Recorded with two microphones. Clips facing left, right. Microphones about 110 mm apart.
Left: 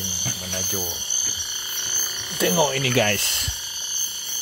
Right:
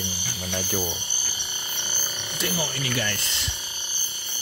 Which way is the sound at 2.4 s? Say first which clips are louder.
Left 9 dB; 90° left.